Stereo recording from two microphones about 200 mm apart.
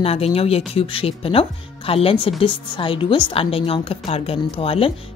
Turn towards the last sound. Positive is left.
turn(degrees=30)  # may be behind; listen again after turning